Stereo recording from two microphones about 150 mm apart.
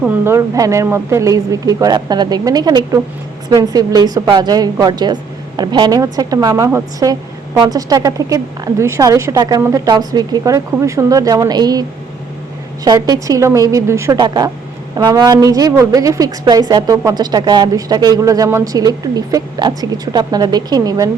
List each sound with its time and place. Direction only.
0.0 s a woman's voice: 15° right (ahead or behind)